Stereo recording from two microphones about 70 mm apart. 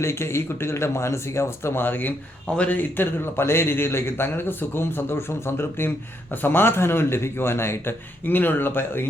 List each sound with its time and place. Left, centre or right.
0.0 s a man's voice: left